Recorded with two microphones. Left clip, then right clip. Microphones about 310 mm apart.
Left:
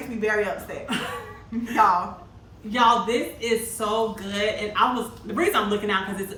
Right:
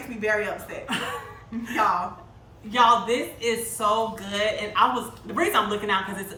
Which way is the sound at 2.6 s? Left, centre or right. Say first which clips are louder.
Right 1 dB; centre.